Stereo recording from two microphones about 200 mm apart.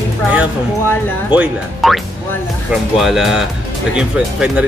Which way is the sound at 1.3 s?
5° right (ahead or behind).